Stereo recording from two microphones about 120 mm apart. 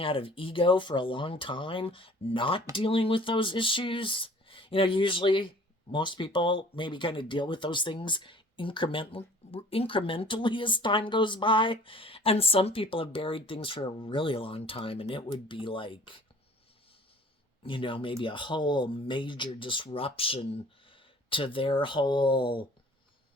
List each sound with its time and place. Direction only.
0.0 s speech: 50° left (ahead or behind)
17.6 s speech: 45° left (ahead or behind)